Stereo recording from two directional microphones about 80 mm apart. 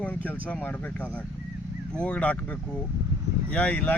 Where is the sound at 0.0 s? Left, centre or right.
Centre.